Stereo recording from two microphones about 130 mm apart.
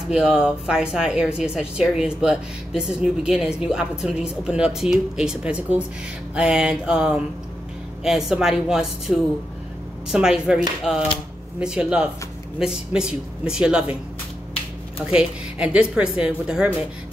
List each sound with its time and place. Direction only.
0.1 s speech: 5° right (ahead or behind)
11.6 s speech: 5° right (ahead or behind)
15.0 s speech: 10° right (ahead or behind)